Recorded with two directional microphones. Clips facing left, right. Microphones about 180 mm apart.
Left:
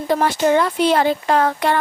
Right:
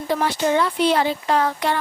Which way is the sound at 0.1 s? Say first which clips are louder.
Left 4 dB; 50° left (ahead or behind).